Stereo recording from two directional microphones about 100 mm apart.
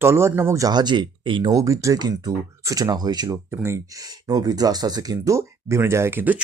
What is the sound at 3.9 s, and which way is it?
Speech, 40° right (ahead or behind).